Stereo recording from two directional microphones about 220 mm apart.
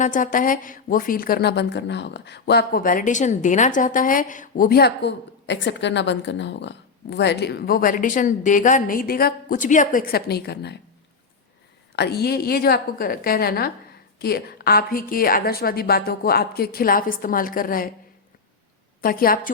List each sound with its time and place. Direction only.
0.0 s speech: 35° left (ahead or behind)
11.9 s a woman's voice: 45° left (ahead or behind)
19.0 s speech: 40° left (ahead or behind)